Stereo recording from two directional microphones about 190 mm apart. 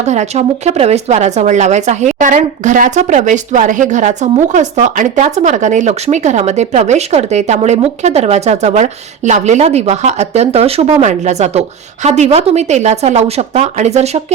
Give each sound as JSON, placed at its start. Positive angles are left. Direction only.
{"t": 0.0, "sound": "speech", "side_deg": -35}